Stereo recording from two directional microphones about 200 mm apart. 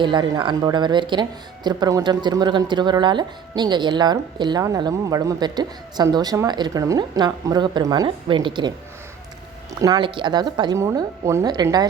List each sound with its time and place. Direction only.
0.0 s speech: 20° right (ahead or behind)
9.8 s speech: 20° right (ahead or behind)